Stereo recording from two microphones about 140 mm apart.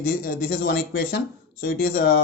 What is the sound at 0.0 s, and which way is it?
Speech, 90° left.